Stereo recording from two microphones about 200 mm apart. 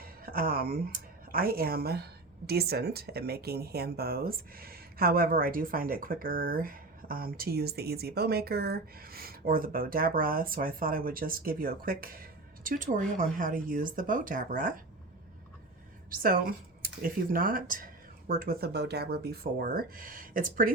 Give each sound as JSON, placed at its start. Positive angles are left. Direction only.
{"t": 0.0, "sound": "speech", "side_deg": -45}
{"t": 16.0, "sound": "speech", "side_deg": -45}